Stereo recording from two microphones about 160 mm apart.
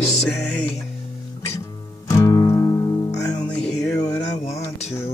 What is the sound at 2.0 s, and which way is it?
Music, 20° left (ahead or behind).